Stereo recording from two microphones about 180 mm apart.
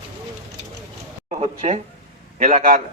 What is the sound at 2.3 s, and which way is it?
Speech, 45° right (ahead or behind).